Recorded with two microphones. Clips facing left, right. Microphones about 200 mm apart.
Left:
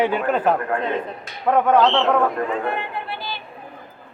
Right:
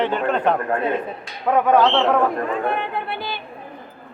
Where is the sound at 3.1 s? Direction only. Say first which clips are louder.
Right 3 dB; 60° right (ahead or behind).